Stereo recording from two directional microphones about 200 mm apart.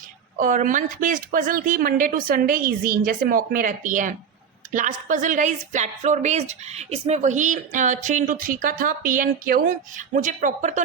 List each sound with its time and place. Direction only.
0.3 s a woman's voice: 40° right (ahead or behind)